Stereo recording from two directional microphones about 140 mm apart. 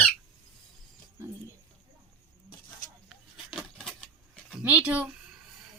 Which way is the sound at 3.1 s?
5° right (ahead or behind).